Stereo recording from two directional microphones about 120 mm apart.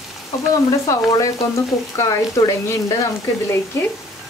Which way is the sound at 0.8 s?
30° left (ahead or behind).